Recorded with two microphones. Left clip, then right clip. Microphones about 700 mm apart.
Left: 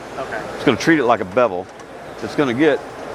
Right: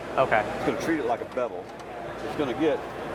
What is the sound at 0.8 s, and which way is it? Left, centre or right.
Speech, left.